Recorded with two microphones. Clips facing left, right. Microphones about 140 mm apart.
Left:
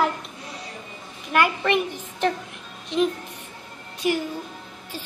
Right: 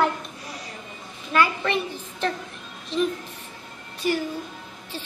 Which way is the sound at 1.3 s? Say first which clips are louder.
Left 1 dB; 60° left (ahead or behind).